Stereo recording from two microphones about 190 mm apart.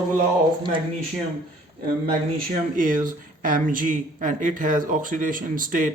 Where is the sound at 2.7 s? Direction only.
45° right (ahead or behind).